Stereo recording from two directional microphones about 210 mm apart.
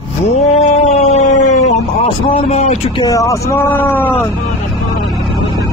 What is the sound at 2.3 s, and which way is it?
Speech, 30° left (ahead or behind).